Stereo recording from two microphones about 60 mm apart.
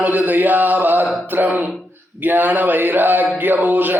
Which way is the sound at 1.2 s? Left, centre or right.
Right.